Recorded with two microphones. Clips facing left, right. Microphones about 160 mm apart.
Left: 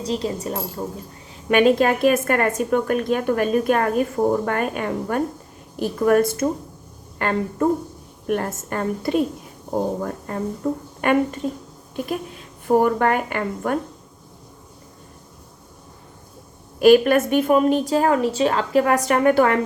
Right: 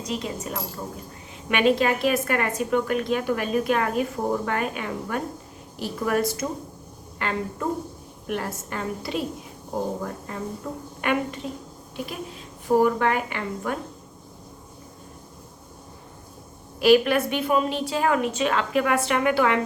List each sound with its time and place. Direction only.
0.0 s a woman's voice: 30° left (ahead or behind)
1.5 s a woman's voice: 45° left (ahead or behind)
12.6 s a woman's voice: 50° left (ahead or behind)
16.8 s a woman's voice: 45° left (ahead or behind)